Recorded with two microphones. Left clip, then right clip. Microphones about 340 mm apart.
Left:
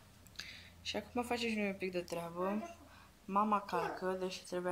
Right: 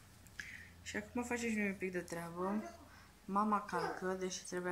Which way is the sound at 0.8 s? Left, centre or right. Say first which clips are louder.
Left 4 dB; centre.